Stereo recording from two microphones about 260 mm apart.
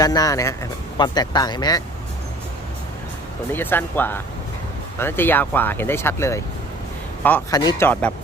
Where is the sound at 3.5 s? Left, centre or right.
Centre.